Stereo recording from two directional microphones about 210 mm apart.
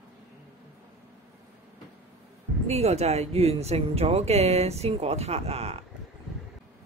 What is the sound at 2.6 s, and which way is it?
Speech, 30° right (ahead or behind).